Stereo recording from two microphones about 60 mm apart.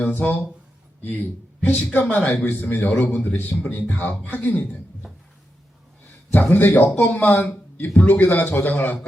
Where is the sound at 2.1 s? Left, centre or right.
Left.